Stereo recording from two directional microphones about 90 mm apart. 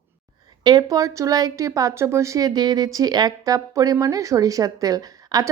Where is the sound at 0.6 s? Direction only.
50° right (ahead or behind).